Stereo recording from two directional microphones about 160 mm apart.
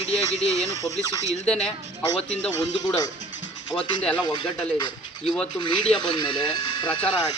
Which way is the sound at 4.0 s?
5° left (ahead or behind).